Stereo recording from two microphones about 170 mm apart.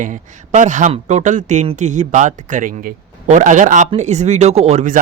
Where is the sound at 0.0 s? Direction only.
50° right (ahead or behind).